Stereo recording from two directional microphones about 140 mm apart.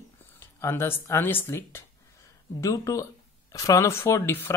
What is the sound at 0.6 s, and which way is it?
Speech, 15° left (ahead or behind).